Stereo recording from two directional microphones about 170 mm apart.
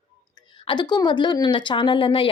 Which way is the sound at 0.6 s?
25° left (ahead or behind).